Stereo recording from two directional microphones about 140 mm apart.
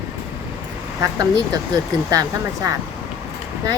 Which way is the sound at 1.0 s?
25° right (ahead or behind).